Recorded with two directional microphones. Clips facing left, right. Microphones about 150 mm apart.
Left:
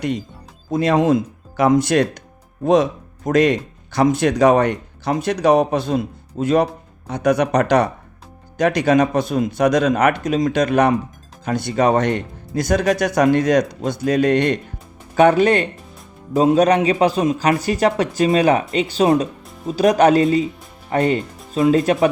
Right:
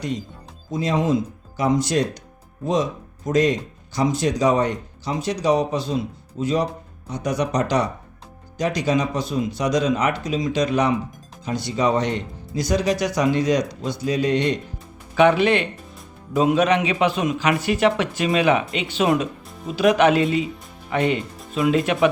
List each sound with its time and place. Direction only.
0.7 s speech: 60° left (ahead or behind)
15.1 s speech: 45° left (ahead or behind)